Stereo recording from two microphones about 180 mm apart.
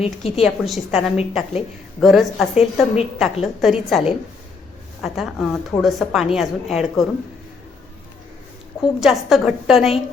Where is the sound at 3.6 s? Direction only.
Centre (ahead or behind).